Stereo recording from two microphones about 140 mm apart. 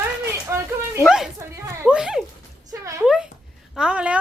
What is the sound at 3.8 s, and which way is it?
Speech, 5° right (ahead or behind).